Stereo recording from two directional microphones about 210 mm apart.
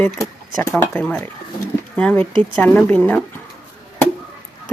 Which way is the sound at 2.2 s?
20° right (ahead or behind).